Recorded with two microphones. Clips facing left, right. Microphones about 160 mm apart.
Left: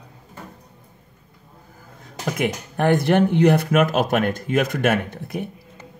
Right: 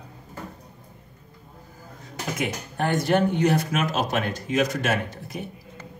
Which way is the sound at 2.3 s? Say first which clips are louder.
Left 5 dB; 60° left (ahead or behind).